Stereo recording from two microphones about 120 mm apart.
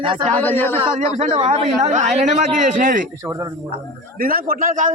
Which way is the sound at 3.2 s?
25° right (ahead or behind).